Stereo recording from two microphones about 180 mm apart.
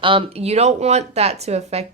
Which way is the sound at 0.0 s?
30° right (ahead or behind).